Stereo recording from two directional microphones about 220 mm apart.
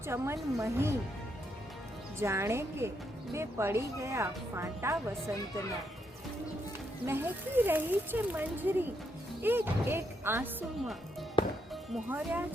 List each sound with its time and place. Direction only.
0.0 s speech: 10° right (ahead or behind)
2.1 s speech: 10° right (ahead or behind)
7.0 s speech: 10° right (ahead or behind)
11.4 s music: 25° left (ahead or behind)
11.7 s speech: 10° right (ahead or behind)